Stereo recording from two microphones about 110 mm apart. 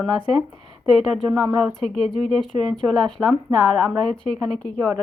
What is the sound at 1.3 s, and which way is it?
Speech, 25° right (ahead or behind).